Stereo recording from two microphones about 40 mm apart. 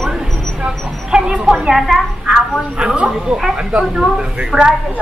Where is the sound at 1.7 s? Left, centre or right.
Centre.